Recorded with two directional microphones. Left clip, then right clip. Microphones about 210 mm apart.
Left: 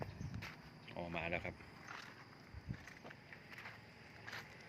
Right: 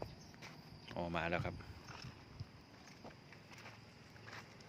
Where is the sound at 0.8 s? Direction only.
35° right (ahead or behind).